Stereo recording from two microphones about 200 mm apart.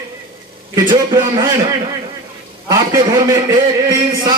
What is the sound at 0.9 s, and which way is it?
Speech, 20° right (ahead or behind).